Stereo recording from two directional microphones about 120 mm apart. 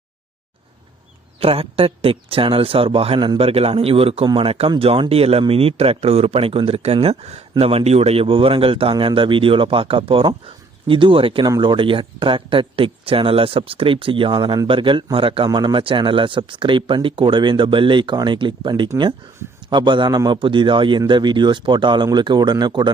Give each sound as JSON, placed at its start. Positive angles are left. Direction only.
{"t": 1.4, "sound": "speech", "side_deg": -50}
{"t": 15.4, "sound": "speech", "side_deg": -35}